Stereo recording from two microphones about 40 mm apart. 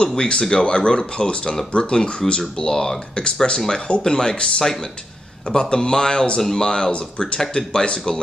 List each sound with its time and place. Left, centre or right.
0.1 s speech: centre